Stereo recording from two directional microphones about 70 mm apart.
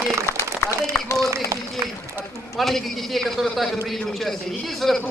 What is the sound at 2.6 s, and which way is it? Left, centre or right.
A man's voice, centre.